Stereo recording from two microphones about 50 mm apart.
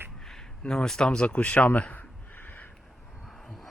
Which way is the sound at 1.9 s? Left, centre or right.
Left.